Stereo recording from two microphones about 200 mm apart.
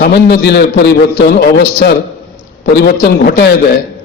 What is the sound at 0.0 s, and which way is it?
A man's voice, 55° left (ahead or behind).